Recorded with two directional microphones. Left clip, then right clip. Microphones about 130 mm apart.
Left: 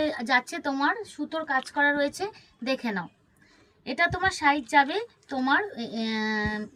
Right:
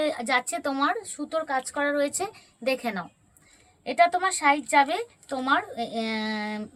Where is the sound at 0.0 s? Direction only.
15° right (ahead or behind).